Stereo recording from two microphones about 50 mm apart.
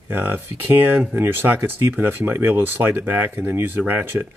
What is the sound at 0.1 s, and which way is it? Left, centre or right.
Speech, right.